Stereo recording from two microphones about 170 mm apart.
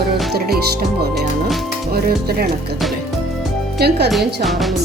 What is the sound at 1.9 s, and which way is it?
Speech, 65° right (ahead or behind).